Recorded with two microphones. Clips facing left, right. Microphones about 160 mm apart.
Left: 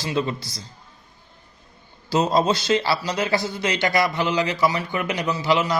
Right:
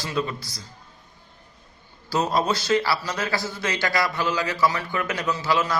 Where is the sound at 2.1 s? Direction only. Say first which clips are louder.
Left 3 dB; 20° left (ahead or behind).